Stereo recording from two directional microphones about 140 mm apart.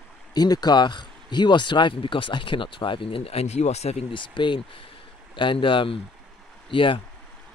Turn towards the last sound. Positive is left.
turn(degrees=40)  # may be behind; listen again after turning